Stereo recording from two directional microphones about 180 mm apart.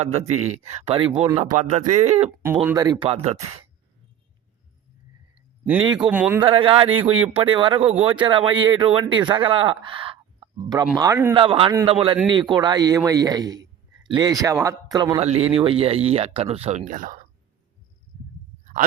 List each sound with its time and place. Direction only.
0.4 s speech: 40° right (ahead or behind)
2.4 s speech: 10° right (ahead or behind)
2.7 s speech: 25° right (ahead or behind)
5.8 s speech: 25° right (ahead or behind)
6.1 s speech: 10° right (ahead or behind)
6.4 s speech: 30° right (ahead or behind)
11.3 s a man's voice: 30° right (ahead or behind)
15.2 s speech: 35° right (ahead or behind)
18.6 s a sound: 45° right (ahead or behind)